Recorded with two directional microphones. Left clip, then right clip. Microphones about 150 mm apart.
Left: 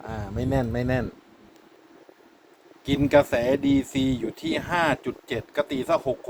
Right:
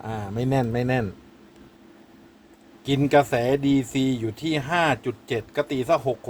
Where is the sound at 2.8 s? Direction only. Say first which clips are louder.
Even; 5° right (ahead or behind).